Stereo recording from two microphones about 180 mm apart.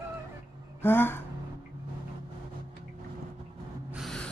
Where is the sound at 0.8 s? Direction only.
10° left (ahead or behind).